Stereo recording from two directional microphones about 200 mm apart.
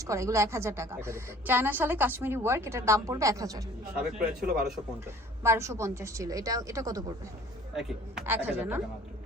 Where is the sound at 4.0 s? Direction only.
5° right (ahead or behind).